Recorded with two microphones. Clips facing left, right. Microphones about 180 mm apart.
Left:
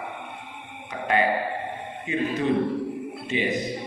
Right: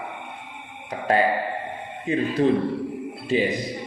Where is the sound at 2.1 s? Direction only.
40° right (ahead or behind).